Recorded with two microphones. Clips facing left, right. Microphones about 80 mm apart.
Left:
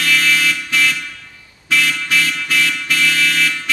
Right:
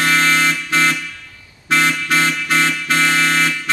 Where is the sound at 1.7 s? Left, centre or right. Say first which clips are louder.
Right 2 dB; right.